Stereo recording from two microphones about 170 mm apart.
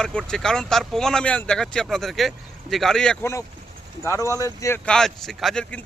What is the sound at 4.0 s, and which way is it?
Speech, 15° left (ahead or behind).